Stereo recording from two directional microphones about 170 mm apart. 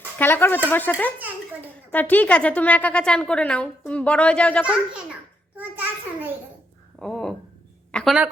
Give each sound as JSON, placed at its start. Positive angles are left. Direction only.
{"t": 0.2, "sound": "a woman's voice", "side_deg": 10}
{"t": 4.6, "sound": "a child's voice", "side_deg": -5}
{"t": 5.5, "sound": "a sound", "side_deg": -10}
{"t": 7.0, "sound": "a child's voice", "side_deg": 5}